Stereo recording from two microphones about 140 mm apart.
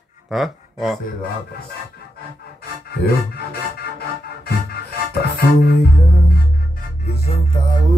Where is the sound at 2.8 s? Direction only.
90° left.